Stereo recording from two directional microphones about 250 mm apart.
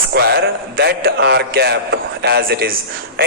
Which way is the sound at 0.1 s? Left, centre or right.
Right.